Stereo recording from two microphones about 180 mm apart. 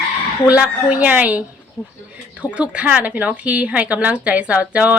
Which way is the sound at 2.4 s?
5° right (ahead or behind).